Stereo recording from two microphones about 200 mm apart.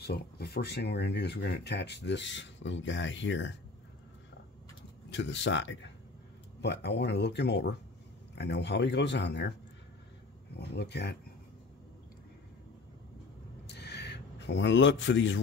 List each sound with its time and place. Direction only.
0.0 s speech: 55° left (ahead or behind)
5.1 s speech: 60° left (ahead or behind)
13.7 s a sound: 55° left (ahead or behind)